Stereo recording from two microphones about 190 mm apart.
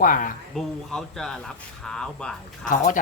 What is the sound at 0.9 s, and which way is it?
Speech, centre (ahead or behind).